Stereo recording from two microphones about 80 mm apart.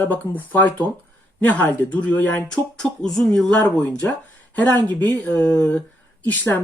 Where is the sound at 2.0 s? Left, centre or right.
Centre.